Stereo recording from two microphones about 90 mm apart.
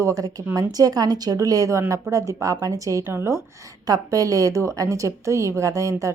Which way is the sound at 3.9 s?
40° right (ahead or behind).